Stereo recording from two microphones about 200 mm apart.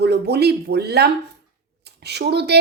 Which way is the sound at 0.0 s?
55° right (ahead or behind).